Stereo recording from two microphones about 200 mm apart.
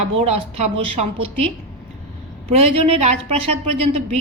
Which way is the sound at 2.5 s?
30° right (ahead or behind).